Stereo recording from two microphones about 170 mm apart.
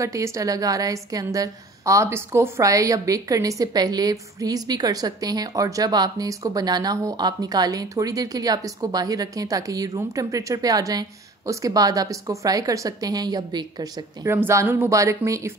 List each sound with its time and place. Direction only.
0.0 s a woman's voice: 20° right (ahead or behind)